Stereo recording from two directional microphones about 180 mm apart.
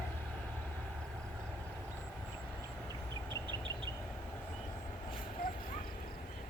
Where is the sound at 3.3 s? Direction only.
25° right (ahead or behind).